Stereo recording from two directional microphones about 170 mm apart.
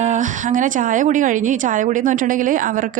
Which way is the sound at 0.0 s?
45° right (ahead or behind).